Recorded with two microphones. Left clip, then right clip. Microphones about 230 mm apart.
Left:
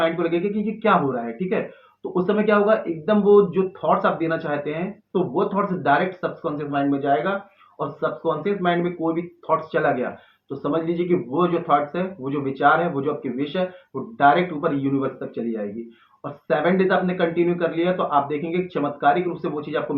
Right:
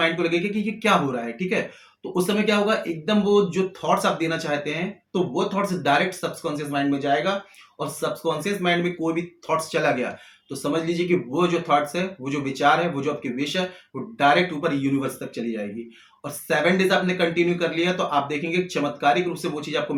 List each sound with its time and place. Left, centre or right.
0.0 s speech: right